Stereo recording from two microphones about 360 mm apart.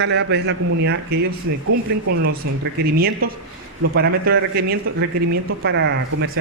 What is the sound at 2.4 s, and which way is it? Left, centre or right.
Speech, right.